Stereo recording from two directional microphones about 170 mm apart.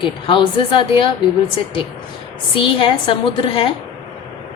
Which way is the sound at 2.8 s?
30° left (ahead or behind).